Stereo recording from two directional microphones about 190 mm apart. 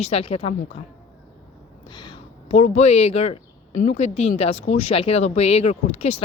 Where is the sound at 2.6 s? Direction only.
35° left (ahead or behind).